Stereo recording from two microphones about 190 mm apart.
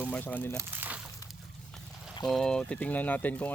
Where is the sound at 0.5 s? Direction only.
10° right (ahead or behind).